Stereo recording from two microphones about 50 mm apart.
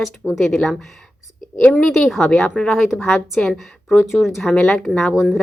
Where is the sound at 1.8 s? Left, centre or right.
Centre.